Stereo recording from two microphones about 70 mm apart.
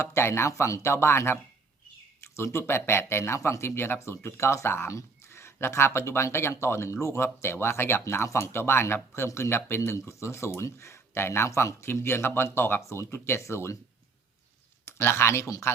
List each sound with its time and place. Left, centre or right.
0.0 s speech: left
14.8 s speech: left